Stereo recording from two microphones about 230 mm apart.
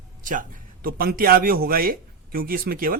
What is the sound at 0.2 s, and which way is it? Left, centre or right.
A man's voice, right.